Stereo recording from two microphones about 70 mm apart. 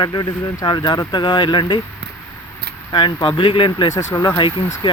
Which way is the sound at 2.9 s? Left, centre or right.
Left.